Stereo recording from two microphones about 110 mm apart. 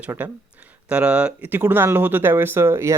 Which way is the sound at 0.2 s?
15° right (ahead or behind).